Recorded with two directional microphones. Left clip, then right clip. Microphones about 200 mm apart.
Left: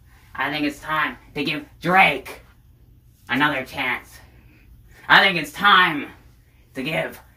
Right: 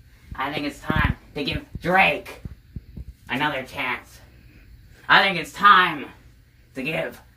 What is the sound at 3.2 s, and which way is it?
Speech, 5° left (ahead or behind).